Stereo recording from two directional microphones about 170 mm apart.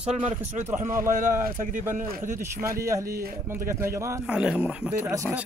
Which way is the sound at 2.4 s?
15° right (ahead or behind).